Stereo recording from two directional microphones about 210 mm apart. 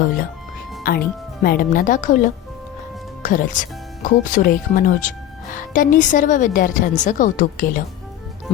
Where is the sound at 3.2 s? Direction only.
40° left (ahead or behind).